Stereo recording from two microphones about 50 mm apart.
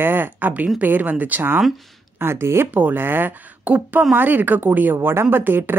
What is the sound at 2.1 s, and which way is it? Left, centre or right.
Speech, right.